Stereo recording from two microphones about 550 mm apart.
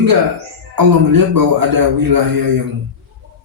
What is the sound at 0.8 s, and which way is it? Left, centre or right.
A man's voice, right.